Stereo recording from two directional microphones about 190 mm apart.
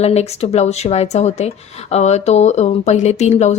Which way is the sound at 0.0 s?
35° left (ahead or behind).